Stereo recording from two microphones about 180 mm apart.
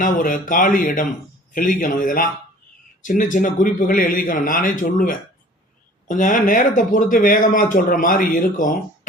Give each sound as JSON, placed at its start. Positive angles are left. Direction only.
{"t": 0.0, "sound": "speech", "side_deg": 45}